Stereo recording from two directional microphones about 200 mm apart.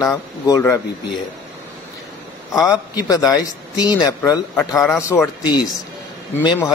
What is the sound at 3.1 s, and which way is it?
Speech, 20° left (ahead or behind).